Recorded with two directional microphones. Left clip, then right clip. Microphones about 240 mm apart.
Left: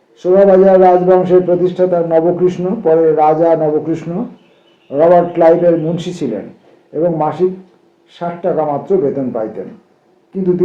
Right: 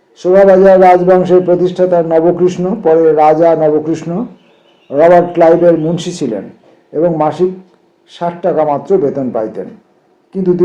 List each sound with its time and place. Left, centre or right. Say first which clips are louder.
0.2 s a man's voice: right 2 dB; right